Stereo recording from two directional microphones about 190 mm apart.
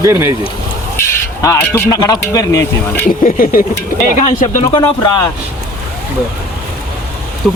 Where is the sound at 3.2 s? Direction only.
50° left (ahead or behind).